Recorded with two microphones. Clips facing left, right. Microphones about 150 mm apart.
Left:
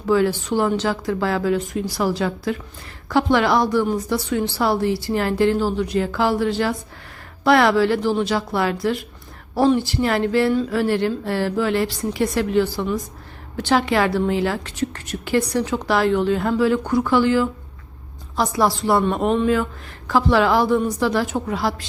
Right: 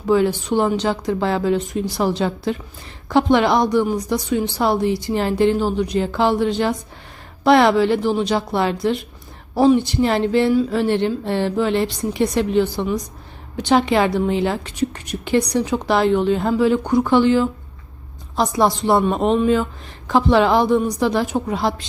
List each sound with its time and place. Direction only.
0.0 s a woman's voice: 20° right (ahead or behind)